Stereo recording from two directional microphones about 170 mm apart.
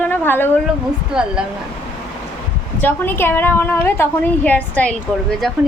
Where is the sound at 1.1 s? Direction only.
5° right (ahead or behind).